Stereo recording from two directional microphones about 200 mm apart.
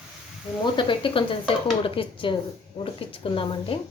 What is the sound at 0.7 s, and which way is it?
A woman's voice, 25° left (ahead or behind).